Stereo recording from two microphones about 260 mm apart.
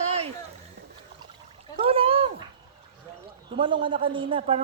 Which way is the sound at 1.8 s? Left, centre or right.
Right.